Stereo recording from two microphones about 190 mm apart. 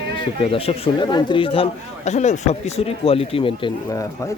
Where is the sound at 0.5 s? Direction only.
30° left (ahead or behind).